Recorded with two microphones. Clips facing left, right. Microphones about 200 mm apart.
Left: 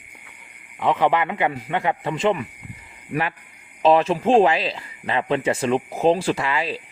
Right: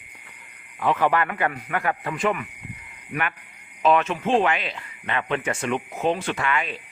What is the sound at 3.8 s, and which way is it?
Speech, 35° left (ahead or behind).